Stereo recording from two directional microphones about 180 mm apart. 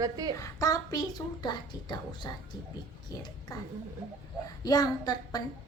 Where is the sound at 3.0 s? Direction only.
20° left (ahead or behind).